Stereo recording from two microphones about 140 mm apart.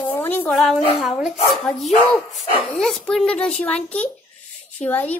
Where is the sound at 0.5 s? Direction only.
Centre (ahead or behind).